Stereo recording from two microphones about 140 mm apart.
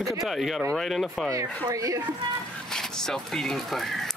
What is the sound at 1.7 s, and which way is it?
Speech, 25° right (ahead or behind).